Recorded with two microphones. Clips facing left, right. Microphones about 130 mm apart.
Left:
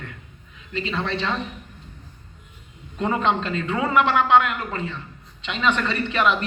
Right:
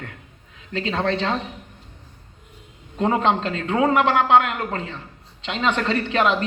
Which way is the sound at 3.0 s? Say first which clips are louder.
Right 2 dB; 35° right (ahead or behind).